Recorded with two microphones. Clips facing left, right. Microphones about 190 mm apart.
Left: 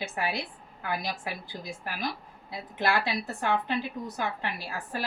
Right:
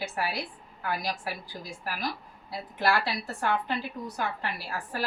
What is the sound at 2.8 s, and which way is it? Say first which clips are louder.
Speech: even; 20° left (ahead or behind).